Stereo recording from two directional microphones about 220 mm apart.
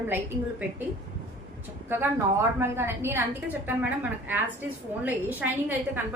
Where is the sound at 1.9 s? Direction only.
10° right (ahead or behind).